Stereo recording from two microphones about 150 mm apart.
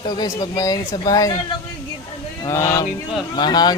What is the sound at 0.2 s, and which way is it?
Speech, 25° left (ahead or behind).